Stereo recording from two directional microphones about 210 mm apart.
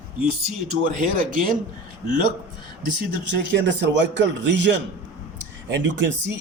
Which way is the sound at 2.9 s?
55° right (ahead or behind).